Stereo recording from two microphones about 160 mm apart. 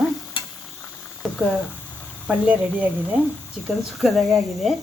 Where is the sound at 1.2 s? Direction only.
Centre (ahead or behind).